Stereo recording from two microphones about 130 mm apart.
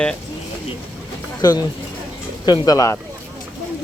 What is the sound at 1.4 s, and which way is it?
Speech, 30° left (ahead or behind).